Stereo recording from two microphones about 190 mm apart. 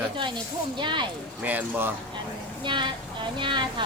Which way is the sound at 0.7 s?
25° right (ahead or behind).